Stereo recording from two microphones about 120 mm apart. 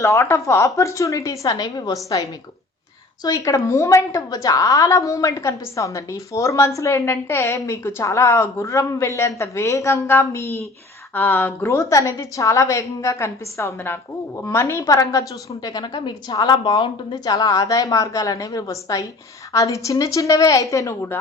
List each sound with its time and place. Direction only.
0.0 s a woman's voice: 25° left (ahead or behind)
3.2 s a woman's voice: 30° left (ahead or behind)